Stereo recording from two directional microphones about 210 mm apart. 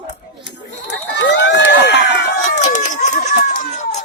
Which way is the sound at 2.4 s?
35° left (ahead or behind).